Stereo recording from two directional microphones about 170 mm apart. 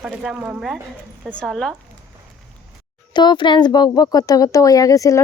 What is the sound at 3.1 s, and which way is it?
Speech, 25° left (ahead or behind).